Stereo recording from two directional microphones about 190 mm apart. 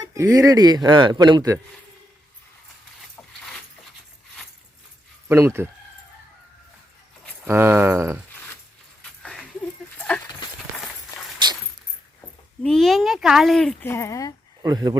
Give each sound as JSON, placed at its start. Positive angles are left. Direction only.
{"t": 0.0, "sound": "speech", "side_deg": -15}
{"t": 5.3, "sound": "speech", "side_deg": -15}
{"t": 7.4, "sound": "speech", "side_deg": -10}
{"t": 9.0, "sound": "dog", "side_deg": 5}
{"t": 10.1, "sound": "clip-clop", "side_deg": 10}
{"t": 11.4, "sound": "keys jangling", "side_deg": -25}
{"t": 12.6, "sound": "speech", "side_deg": 0}
{"t": 14.6, "sound": "speech", "side_deg": -20}